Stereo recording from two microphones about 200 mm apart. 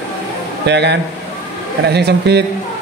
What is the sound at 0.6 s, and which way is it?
A man's voice, 60° right (ahead or behind).